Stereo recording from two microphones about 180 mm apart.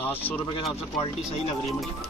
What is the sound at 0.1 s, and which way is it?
Speech, 10° left (ahead or behind).